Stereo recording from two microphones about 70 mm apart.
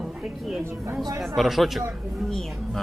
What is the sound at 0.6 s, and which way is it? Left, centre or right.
Speech, right.